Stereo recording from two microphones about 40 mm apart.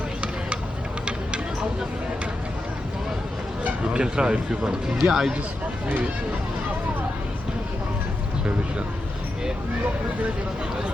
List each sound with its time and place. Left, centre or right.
3.8 s speech: right